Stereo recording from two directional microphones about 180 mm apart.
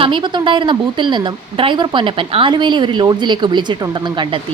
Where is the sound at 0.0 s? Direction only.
25° right (ahead or behind).